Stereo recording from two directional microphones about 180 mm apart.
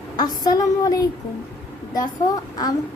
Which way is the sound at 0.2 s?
20° left (ahead or behind).